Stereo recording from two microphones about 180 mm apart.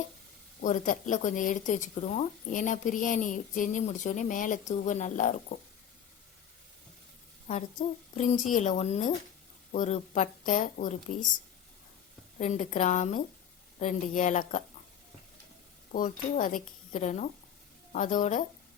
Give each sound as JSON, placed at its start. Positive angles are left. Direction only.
{"t": 0.6, "sound": "speech", "side_deg": 45}
{"t": 7.4, "sound": "speech", "side_deg": 45}
{"t": 12.4, "sound": "speech", "side_deg": 40}
{"t": 15.9, "sound": "speech", "side_deg": 45}